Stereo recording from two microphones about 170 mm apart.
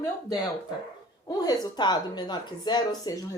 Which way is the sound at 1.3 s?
25° left (ahead or behind).